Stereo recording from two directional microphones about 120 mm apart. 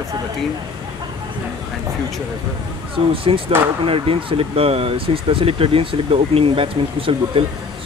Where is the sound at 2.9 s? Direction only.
50° right (ahead or behind).